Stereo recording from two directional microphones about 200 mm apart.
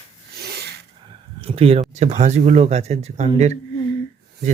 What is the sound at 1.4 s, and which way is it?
Speech, 30° right (ahead or behind).